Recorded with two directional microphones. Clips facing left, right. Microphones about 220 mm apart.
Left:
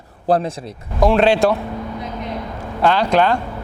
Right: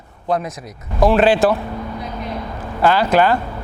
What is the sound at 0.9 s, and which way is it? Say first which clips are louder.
Speech: right 1 dB; centre (ahead or behind).